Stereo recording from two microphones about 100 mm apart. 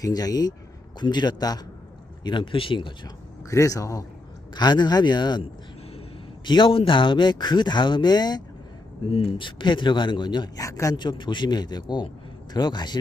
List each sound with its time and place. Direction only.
0.0 s speech: 40° left (ahead or behind)
2.2 s speech: 55° left (ahead or behind)
3.5 s speech: 30° left (ahead or behind)
4.5 s speech: 45° left (ahead or behind)
6.4 s speech: 50° left (ahead or behind)
9.0 s speech: 70° left (ahead or behind); by 10.9 s 35° left (ahead or behind)
10.9 s speech: 50° left (ahead or behind)